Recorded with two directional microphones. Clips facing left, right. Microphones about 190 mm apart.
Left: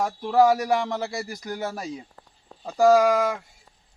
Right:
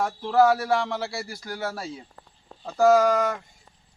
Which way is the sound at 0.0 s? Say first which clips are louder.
Left 1 dB; 10° left (ahead or behind).